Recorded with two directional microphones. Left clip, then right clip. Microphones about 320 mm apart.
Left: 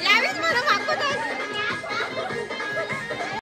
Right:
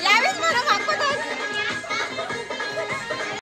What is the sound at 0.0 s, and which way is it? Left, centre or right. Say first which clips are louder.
Chatter: right 2 dB; centre.